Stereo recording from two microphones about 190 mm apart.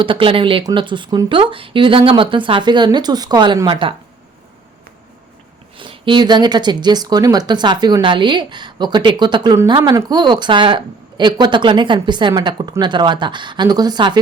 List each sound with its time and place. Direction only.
0.0 s speech: 25° right (ahead or behind)
5.7 s speech: 25° right (ahead or behind)